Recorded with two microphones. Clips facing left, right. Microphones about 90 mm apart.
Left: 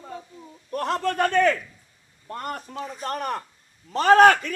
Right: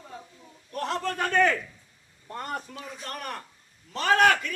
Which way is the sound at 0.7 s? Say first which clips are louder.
Left 5 dB; 50° left (ahead or behind).